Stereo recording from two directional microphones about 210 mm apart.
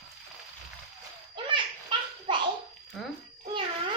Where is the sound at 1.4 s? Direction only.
25° right (ahead or behind).